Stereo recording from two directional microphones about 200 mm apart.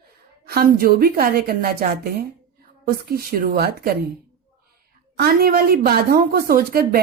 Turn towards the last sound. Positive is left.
turn(degrees=-50)  # may be behind; listen again after turning